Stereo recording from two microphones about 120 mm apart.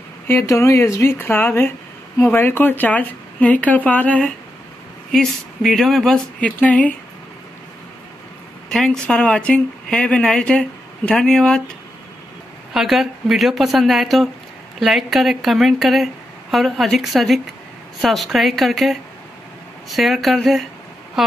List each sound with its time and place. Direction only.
0.3 s a woman's voice: 20° left (ahead or behind)
8.6 s speech: 5° left (ahead or behind)
12.7 s a woman's voice: centre (ahead or behind)